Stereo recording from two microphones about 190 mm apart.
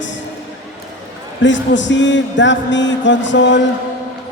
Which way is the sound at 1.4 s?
70° left (ahead or behind).